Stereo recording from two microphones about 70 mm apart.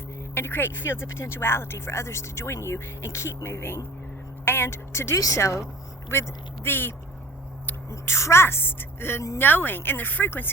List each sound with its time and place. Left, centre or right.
0.3 s speech: left
6.1 s speech: left
9.4 s speech: left